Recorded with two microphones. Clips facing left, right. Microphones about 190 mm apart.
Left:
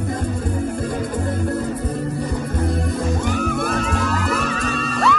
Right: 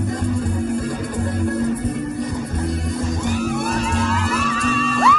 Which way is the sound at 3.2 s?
60° left (ahead or behind).